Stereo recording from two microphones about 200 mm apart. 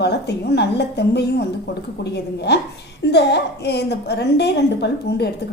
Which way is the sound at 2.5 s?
55° left (ahead or behind).